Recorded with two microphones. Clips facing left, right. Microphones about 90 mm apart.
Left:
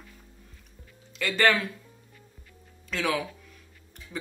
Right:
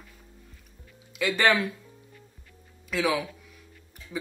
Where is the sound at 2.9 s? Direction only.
5° right (ahead or behind).